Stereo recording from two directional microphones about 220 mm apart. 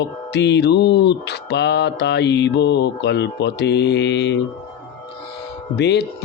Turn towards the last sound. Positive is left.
turn(degrees=50)  # may be behind; listen again after turning